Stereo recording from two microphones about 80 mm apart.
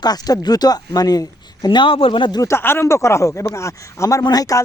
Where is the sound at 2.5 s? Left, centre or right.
Left.